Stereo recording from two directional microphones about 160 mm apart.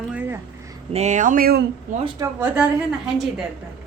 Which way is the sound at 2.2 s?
10° right (ahead or behind).